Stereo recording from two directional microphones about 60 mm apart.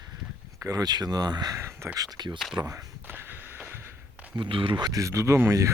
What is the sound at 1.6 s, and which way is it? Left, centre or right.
Speech, right.